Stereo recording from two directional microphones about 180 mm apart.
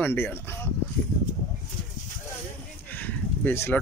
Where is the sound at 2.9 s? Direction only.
10° left (ahead or behind).